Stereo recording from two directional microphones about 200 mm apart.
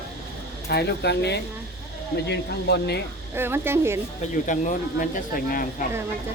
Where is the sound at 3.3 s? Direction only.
10° right (ahead or behind).